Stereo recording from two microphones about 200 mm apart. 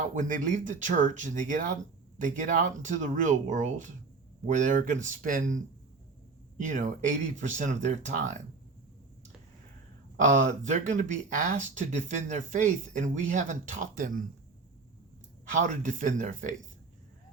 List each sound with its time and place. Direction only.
0.0 s speech: 40° right (ahead or behind)
6.6 s speech: 40° right (ahead or behind)
10.2 s speech: 40° right (ahead or behind)
15.5 s speech: 40° right (ahead or behind)